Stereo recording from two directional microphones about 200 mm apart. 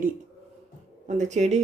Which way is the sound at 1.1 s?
35° right (ahead or behind).